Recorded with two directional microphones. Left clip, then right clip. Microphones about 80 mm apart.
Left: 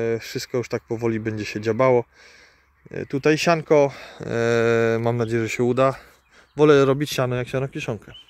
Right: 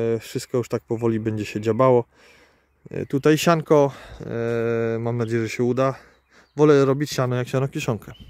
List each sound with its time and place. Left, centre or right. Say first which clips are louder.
0.0 s speech: even; right
2.9 s speech: right 1 dB; right
4.2 s a sound: left 4 dB; centre
5.2 s speech: left 1 dB; right
7.4 s speech: right 2 dB; right